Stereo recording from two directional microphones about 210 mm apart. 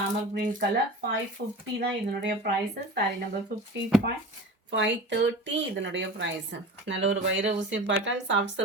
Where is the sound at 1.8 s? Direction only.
50° right (ahead or behind).